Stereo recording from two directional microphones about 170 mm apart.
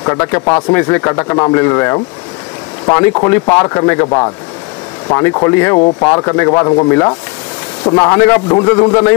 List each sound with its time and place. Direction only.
0.0 s speech: 20° left (ahead or behind)